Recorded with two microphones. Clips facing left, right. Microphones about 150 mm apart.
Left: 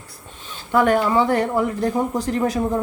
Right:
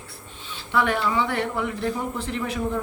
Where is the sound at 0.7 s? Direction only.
45° left (ahead or behind).